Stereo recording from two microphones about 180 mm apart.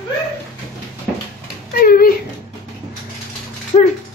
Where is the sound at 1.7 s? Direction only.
55° left (ahead or behind).